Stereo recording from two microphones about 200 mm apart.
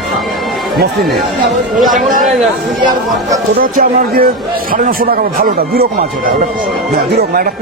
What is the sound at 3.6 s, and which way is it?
A man's voice, 45° right (ahead or behind).